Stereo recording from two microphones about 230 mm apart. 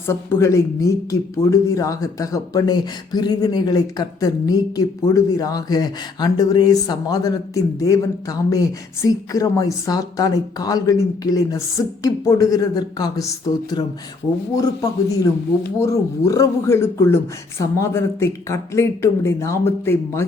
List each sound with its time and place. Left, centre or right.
0.1 s speech: centre